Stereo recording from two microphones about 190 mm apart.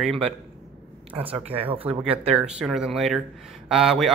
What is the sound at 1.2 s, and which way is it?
Speech, 30° right (ahead or behind).